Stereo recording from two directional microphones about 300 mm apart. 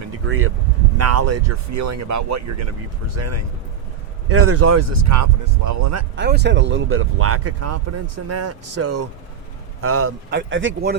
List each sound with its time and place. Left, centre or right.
0.3 s speech: right
0.9 s speech: right
3.2 s speech: right
6.1 s a man's voice: right